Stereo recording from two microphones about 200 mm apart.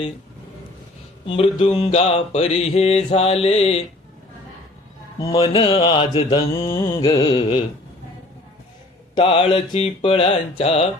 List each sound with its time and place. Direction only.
1.3 s mantra: 25° left (ahead or behind)
5.2 s mantra: 30° left (ahead or behind)
9.1 s mantra: 25° left (ahead or behind)